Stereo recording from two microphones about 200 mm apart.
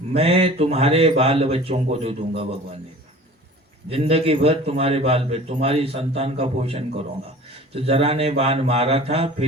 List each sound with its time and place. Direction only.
0.1 s a man's voice: 30° right (ahead or behind)
3.8 s a man's voice: 30° right (ahead or behind)